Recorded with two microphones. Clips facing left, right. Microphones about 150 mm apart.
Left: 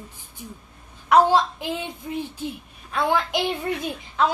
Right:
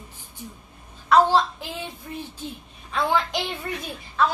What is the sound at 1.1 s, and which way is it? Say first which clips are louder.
A woman's voice: left 1 dB; 15° left (ahead or behind).